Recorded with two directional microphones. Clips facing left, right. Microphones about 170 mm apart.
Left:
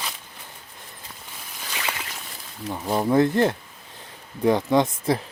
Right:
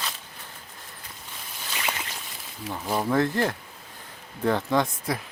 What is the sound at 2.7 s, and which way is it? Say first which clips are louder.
Speech: left 4 dB; 15° left (ahead or behind).